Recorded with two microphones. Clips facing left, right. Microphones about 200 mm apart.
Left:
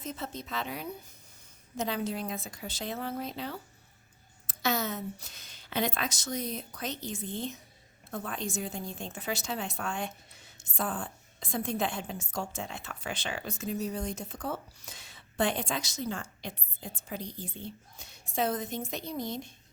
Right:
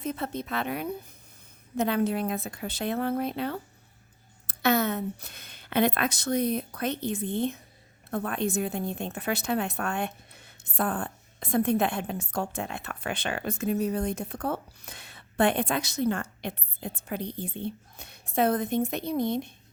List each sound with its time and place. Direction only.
0.0 s a woman's voice: 60° right (ahead or behind)